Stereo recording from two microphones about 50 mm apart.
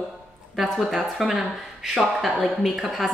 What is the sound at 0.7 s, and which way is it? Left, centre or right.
A woman's voice, centre.